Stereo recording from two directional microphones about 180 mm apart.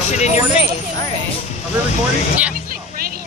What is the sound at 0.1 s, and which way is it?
Speech, 40° left (ahead or behind).